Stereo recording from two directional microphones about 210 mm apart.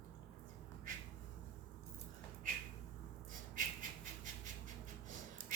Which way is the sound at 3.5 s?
40° right (ahead or behind).